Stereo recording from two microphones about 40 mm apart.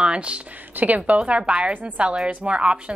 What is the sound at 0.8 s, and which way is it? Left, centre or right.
Speech, right.